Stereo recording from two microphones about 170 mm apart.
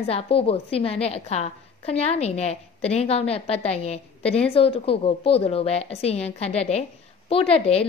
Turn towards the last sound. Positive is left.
turn(degrees=35)  # may be behind; listen again after turning